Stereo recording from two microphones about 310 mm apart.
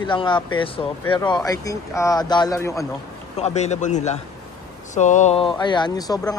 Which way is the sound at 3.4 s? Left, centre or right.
Left.